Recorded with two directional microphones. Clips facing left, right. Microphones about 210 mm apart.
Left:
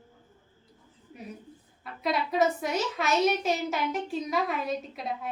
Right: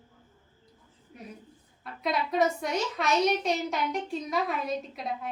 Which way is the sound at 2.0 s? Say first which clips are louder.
Left 1 dB; centre (ahead or behind).